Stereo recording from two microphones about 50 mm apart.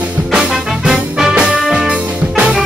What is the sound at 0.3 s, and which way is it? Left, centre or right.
Music, centre.